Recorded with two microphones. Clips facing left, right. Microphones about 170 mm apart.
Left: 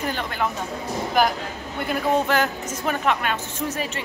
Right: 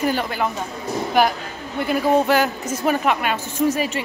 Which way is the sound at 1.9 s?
10° right (ahead or behind).